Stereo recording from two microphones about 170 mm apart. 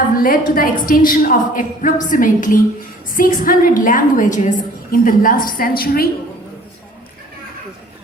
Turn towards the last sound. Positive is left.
turn(degrees=60)  # may be behind; listen again after turning